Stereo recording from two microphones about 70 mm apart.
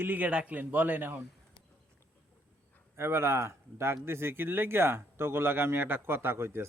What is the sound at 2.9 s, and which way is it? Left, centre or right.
Speech, right.